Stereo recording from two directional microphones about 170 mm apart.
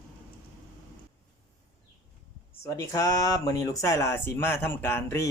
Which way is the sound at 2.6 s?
20° left (ahead or behind).